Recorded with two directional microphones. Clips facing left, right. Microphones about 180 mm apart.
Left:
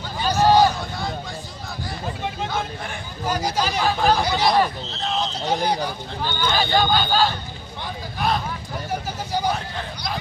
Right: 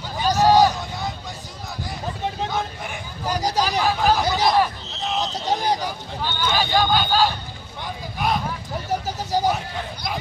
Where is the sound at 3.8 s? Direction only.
5° right (ahead or behind).